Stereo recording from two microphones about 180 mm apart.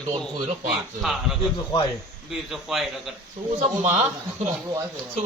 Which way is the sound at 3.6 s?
40° right (ahead or behind).